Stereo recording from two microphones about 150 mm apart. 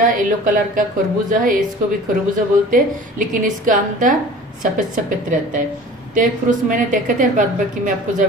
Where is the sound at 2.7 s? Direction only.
65° right (ahead or behind).